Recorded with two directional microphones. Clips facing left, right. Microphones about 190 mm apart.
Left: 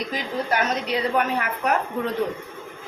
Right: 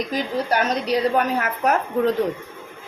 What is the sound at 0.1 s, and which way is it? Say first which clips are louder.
A woman's voice: right 3 dB; 40° right (ahead or behind).